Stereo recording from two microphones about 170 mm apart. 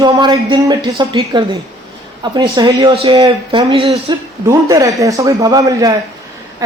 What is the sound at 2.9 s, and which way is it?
A man's voice, 35° right (ahead or behind).